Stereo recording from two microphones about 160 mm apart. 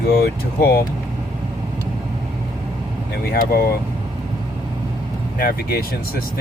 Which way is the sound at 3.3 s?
70° left (ahead or behind).